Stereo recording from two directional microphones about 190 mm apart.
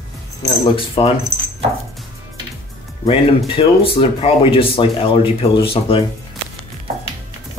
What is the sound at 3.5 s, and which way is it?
Speech, 30° left (ahead or behind).